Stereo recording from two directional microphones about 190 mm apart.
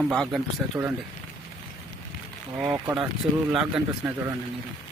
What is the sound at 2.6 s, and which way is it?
Speech, 15° right (ahead or behind).